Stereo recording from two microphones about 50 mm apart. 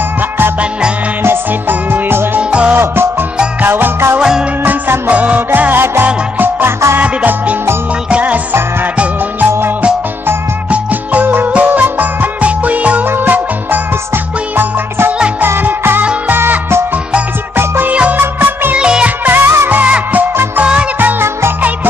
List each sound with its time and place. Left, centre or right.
1.2 s music: right
5.1 s music: right
7.0 s music: right
10.7 s music: right
15.4 s music: right
17.8 s music: right
18.8 s music: centre
19.0 s music: right
21.2 s music: right